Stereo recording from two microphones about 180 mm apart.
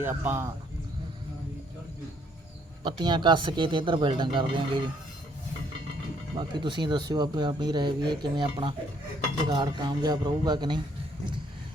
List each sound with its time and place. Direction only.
0.0 s speech: 10° right (ahead or behind)
2.8 s speech: 25° right (ahead or behind)
6.3 s speech: 25° right (ahead or behind)